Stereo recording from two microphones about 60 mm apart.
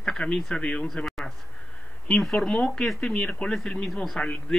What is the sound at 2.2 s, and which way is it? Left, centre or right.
Speech, centre.